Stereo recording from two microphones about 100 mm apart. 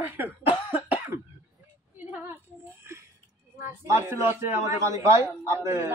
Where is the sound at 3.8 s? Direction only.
30° right (ahead or behind).